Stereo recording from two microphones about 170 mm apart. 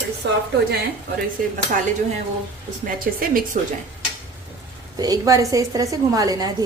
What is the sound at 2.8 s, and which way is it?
Speech, 55° right (ahead or behind).